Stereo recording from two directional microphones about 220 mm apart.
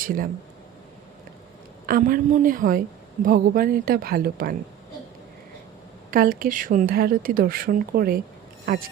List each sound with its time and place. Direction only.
0.0 s speech: 40° right (ahead or behind)
1.9 s a woman's voice: 40° right (ahead or behind)
6.1 s a woman's voice: 40° right (ahead or behind)